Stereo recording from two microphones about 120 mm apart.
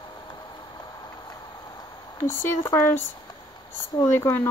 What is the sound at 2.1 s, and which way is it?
Speech, 25° left (ahead or behind).